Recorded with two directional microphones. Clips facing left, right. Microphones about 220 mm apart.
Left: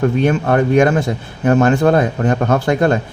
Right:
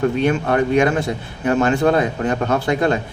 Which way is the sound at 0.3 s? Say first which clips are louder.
Left 3 dB; 45° left (ahead or behind).